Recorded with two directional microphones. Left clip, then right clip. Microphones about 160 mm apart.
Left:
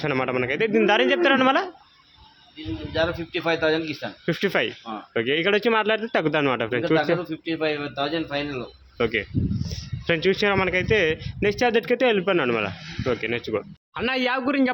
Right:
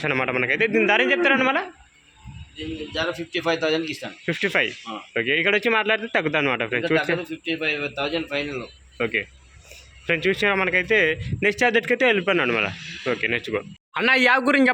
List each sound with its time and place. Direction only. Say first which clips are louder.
0.0 s speech: right 1 dB; 15° left (ahead or behind); by 1.6 s 30° left (ahead or behind)
2.9 s speech: left 2 dB; 50° left (ahead or behind)
4.3 s speech: right 1 dB; 20° left (ahead or behind)
7.3 s speech: even; 70° left (ahead or behind); by 8.6 s 55° left (ahead or behind)
9.0 s speech: left 1 dB; 25° left (ahead or behind)
13.9 s speech: right 6 dB; 10° right (ahead or behind)